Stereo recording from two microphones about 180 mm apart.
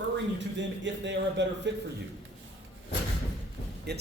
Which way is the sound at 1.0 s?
80° right.